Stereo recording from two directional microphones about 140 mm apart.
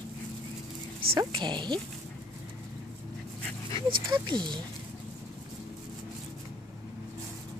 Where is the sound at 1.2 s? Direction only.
35° right (ahead or behind).